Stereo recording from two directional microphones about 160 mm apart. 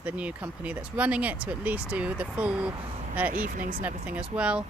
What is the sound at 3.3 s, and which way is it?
Speech, 60° right (ahead or behind).